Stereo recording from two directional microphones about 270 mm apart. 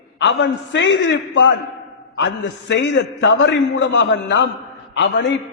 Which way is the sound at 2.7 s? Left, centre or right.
Left.